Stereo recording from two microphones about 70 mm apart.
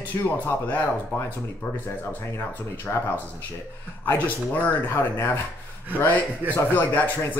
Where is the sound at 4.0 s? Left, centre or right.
Left.